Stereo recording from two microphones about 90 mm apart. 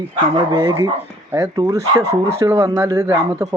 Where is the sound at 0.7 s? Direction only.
50° right (ahead or behind).